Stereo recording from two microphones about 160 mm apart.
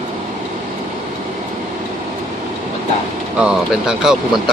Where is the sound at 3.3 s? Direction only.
5° right (ahead or behind).